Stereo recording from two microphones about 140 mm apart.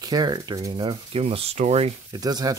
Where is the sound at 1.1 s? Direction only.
45° right (ahead or behind).